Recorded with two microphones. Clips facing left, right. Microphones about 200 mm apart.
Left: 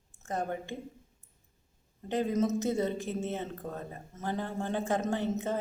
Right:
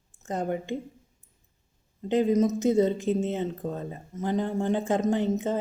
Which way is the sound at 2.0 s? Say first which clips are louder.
Right 6 dB; 20° right (ahead or behind).